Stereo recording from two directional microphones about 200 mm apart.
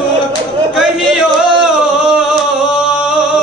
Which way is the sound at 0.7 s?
Centre (ahead or behind).